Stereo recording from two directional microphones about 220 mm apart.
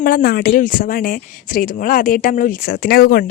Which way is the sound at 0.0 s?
45° left (ahead or behind).